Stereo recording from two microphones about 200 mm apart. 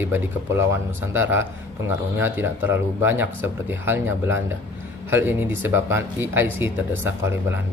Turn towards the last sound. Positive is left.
turn(degrees=-10)  # may be behind; listen again after turning